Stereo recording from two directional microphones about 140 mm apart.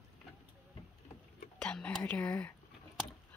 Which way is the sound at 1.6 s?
10° left (ahead or behind).